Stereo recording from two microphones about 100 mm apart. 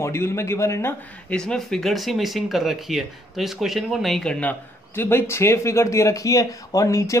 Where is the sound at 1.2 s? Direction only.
5° left (ahead or behind).